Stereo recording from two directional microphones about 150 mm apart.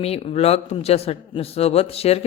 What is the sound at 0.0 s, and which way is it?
A man's voice, 40° left (ahead or behind).